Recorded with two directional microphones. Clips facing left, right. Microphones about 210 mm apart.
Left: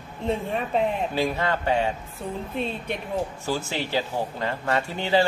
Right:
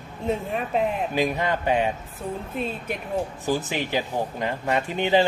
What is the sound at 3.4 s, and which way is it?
Speech, 15° right (ahead or behind).